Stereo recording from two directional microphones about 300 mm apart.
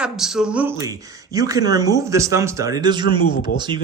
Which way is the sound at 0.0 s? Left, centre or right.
Centre.